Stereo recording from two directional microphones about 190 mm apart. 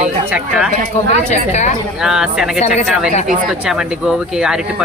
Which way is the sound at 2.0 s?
5° right (ahead or behind).